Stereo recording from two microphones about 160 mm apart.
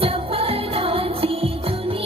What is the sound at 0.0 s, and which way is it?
Music, 35° right (ahead or behind).